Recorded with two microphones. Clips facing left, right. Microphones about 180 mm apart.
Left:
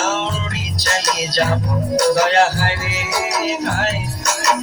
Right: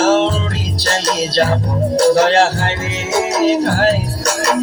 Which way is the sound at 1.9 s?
30° right (ahead or behind).